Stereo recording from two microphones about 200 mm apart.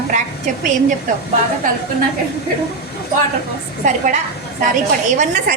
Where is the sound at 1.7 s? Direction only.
40° right (ahead or behind).